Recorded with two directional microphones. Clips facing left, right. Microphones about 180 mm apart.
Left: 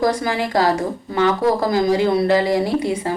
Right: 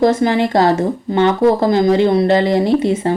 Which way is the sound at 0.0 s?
25° right (ahead or behind).